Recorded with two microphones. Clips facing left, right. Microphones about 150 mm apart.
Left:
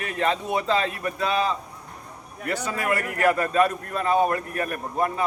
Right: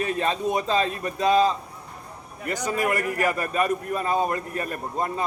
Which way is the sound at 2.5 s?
15° right (ahead or behind).